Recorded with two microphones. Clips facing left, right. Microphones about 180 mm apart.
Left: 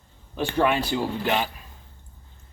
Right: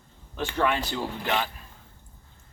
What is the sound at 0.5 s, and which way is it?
Speech, 10° left (ahead or behind).